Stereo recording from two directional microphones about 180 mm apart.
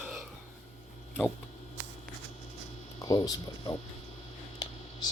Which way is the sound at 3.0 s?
20° left (ahead or behind).